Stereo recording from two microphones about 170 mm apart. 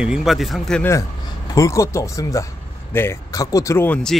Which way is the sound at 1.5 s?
20° left (ahead or behind).